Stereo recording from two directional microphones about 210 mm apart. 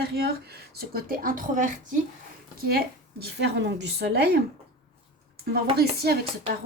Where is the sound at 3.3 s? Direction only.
55° right (ahead or behind).